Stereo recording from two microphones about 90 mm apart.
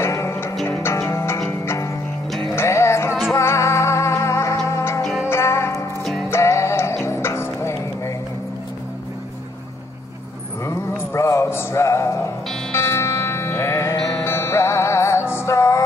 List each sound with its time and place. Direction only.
0.0 s music: 30° left (ahead or behind)
2.5 s music: 30° left (ahead or behind)
10.6 s music: 35° left (ahead or behind)